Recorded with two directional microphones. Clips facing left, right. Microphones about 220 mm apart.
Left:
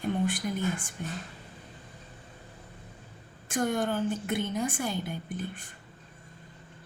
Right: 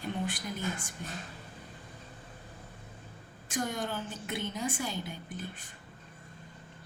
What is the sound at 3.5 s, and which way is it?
A woman's voice, 55° left (ahead or behind).